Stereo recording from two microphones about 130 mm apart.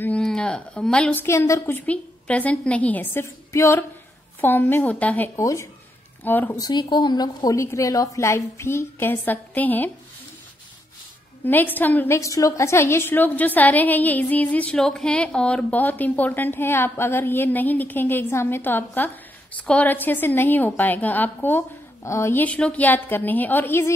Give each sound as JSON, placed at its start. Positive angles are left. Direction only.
{"t": 0.0, "sound": "speech", "side_deg": 5}
{"t": 1.2, "sound": "a woman's voice", "side_deg": 20}
{"t": 5.3, "sound": "a woman's voice", "side_deg": 25}
{"t": 6.6, "sound": "a woman's voice", "side_deg": 35}
{"t": 11.4, "sound": "a woman's voice", "side_deg": 15}